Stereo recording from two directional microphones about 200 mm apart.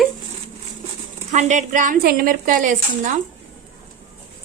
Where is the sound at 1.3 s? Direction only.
35° right (ahead or behind).